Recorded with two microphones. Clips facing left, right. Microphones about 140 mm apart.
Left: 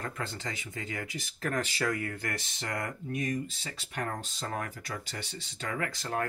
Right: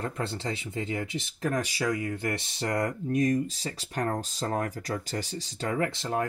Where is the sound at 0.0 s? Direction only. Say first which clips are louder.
Right 5 dB; 30° right (ahead or behind).